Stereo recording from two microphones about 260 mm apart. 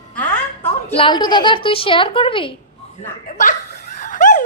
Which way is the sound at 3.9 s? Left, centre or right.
Left.